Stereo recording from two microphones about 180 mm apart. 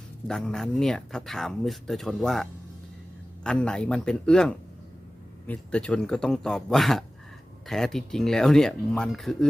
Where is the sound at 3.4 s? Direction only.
5° left (ahead or behind).